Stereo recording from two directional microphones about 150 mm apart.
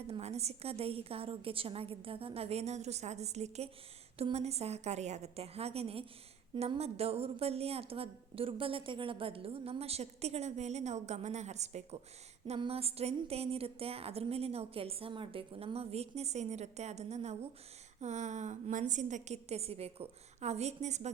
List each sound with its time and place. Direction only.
0.1 s a woman's voice: 45° right (ahead or behind)